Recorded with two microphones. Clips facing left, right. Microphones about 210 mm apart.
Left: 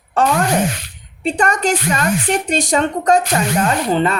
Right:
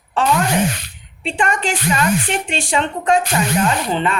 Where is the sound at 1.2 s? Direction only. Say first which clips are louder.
Left 3 dB; 40° left (ahead or behind).